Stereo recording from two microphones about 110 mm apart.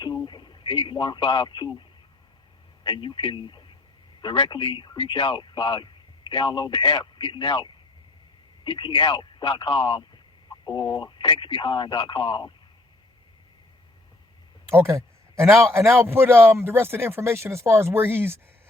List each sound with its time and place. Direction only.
0.0 s speech: 45° left (ahead or behind)
2.8 s a man's voice: 45° left (ahead or behind)
14.7 s a man's voice: 25° right (ahead or behind)